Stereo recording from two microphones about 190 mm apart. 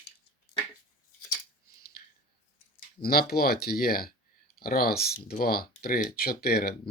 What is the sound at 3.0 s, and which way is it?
Speech, 50° left (ahead or behind).